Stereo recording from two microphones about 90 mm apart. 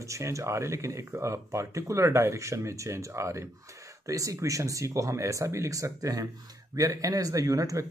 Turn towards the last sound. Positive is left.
turn(degrees=-40)  # may be behind; listen again after turning